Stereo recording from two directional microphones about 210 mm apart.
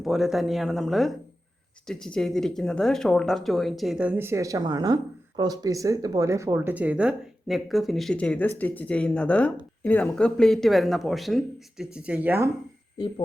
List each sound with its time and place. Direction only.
0.0 s speech: centre (ahead or behind)